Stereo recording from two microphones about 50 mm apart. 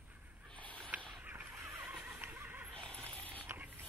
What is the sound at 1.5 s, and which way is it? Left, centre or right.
Neigh, right.